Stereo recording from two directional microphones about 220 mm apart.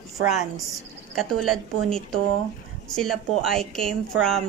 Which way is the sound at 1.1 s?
Centre (ahead or behind).